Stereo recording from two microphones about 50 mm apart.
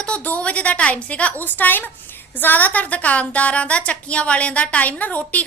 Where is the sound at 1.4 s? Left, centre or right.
Left.